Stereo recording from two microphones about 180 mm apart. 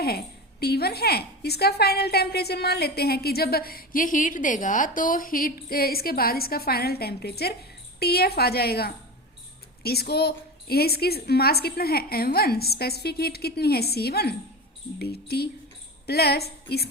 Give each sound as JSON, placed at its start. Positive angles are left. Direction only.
{"t": 0.0, "sound": "a woman's voice", "side_deg": 60}